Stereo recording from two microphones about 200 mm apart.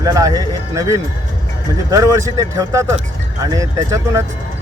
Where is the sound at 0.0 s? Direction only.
15° right (ahead or behind).